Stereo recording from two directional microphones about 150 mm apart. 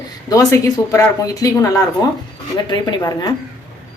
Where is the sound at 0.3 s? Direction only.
20° left (ahead or behind).